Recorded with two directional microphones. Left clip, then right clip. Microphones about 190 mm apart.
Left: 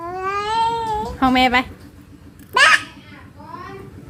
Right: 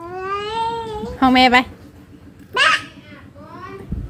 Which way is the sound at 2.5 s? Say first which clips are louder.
Left 3 dB; 5° left (ahead or behind).